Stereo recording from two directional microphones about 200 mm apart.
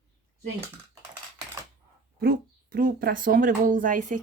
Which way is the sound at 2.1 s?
50° right (ahead or behind).